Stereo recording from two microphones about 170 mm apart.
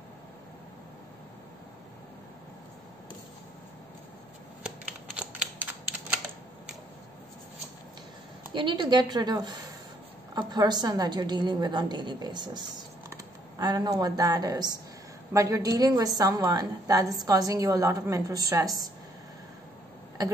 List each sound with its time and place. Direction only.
4.6 s scissors: 5° right (ahead or behind)
8.5 s a woman's voice: 30° right (ahead or behind)